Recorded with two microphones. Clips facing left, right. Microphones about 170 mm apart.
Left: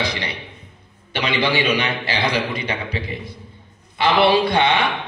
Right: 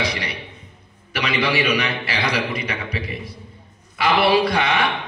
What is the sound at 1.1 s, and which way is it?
A man's voice, 30° left (ahead or behind).